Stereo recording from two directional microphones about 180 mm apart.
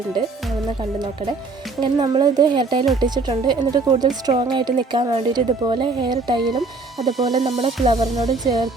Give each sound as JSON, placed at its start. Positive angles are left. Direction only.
{"t": 1.8, "sound": "speech", "side_deg": -25}
{"t": 6.6, "sound": "speech", "side_deg": 0}
{"t": 7.3, "sound": "music", "side_deg": -35}
{"t": 7.9, "sound": "speech", "side_deg": -20}